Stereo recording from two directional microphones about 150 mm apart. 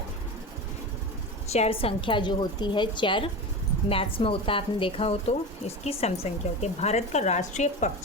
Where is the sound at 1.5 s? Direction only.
40° left (ahead or behind).